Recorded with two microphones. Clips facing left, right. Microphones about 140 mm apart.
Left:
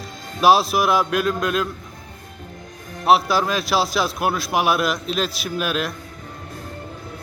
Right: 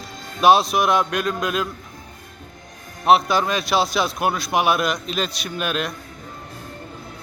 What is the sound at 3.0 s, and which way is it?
A man's voice, centre (ahead or behind).